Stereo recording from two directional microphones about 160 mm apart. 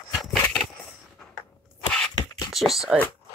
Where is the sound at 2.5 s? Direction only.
Centre (ahead or behind).